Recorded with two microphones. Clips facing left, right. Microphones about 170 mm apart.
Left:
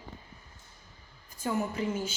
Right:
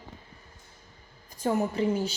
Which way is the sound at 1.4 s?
35° right (ahead or behind).